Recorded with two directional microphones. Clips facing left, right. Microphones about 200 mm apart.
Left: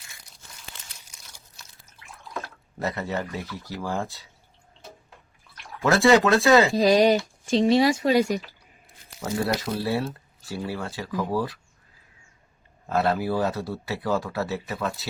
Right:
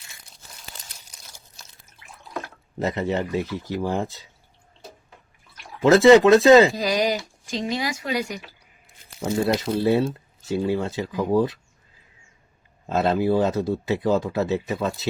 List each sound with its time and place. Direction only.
0.7 s crumpling: 40° right (ahead or behind)
2.7 s speech: 20° right (ahead or behind)
5.8 s speech: 20° right (ahead or behind)
6.7 s speech: 30° left (ahead or behind)
9.2 s speech: 25° right (ahead or behind)
12.9 s speech: 20° right (ahead or behind)